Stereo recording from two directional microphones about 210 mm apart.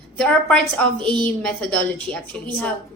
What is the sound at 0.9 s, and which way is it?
Speech, 25° right (ahead or behind).